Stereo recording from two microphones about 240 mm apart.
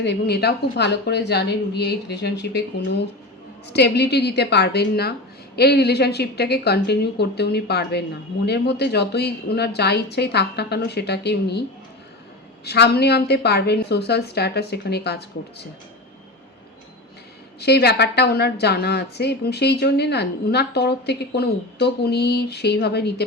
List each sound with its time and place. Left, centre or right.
0.0 s a woman's voice: left
12.6 s a woman's voice: left
17.6 s a woman's voice: left